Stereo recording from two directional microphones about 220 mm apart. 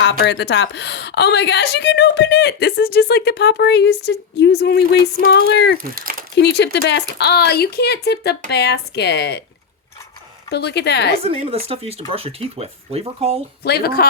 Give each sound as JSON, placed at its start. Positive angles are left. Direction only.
{"t": 0.0, "sound": "a woman's voice", "side_deg": 55}
{"t": 5.8, "sound": "speech", "side_deg": -40}
{"t": 6.3, "sound": "a woman's voice", "side_deg": 50}
{"t": 10.5, "sound": "a woman's voice", "side_deg": 50}
{"t": 11.2, "sound": "speech", "side_deg": -25}
{"t": 13.6, "sound": "a woman's voice", "side_deg": 45}